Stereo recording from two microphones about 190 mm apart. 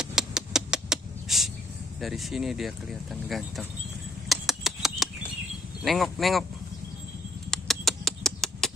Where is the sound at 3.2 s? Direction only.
Centre (ahead or behind).